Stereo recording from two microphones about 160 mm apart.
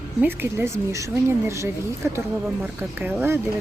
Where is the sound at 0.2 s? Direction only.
15° right (ahead or behind).